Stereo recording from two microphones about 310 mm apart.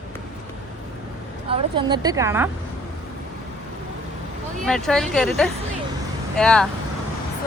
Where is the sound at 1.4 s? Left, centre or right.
Centre.